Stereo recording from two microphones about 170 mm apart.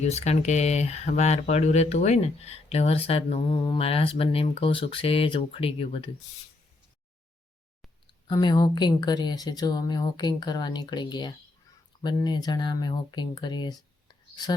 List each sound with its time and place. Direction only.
0.0 s speech: 40° left (ahead or behind)
8.3 s a woman's voice: 25° left (ahead or behind)